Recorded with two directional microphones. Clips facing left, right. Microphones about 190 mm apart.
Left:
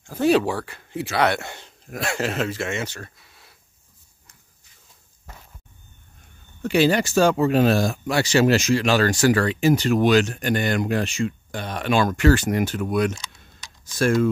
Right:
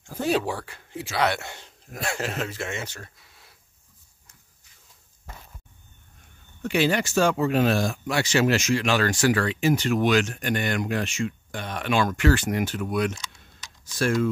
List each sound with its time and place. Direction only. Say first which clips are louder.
0.2 s speech: left 6 dB; 75° left (ahead or behind)
6.6 s speech: left 4 dB; 35° left (ahead or behind)
13.1 s typing: left 3 dB; 30° left (ahead or behind)
13.8 s speech: left 4 dB; 45° left (ahead or behind)